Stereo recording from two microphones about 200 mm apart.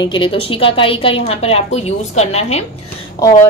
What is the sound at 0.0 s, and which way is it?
A woman's voice, 25° left (ahead or behind).